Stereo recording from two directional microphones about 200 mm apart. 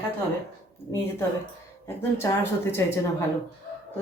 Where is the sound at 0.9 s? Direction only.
15° left (ahead or behind).